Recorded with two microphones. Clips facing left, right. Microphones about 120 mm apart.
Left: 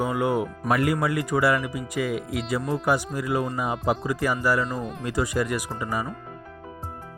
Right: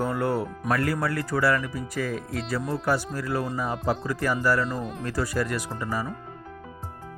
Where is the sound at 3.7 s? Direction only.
Centre (ahead or behind).